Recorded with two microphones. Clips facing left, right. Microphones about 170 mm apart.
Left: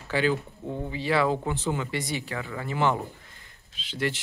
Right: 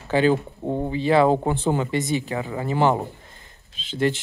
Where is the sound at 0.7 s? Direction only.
40° right (ahead or behind).